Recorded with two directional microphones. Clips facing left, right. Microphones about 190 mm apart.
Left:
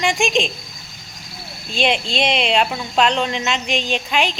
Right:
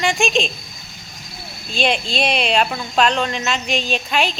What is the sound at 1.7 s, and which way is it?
A woman's voice, 20° left (ahead or behind).